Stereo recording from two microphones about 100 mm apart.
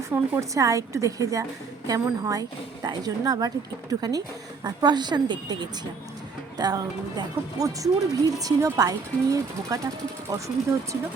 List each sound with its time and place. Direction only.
0.1 s a woman's voice: 30° right (ahead or behind)